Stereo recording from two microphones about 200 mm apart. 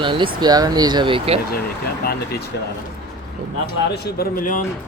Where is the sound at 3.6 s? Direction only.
50° left (ahead or behind).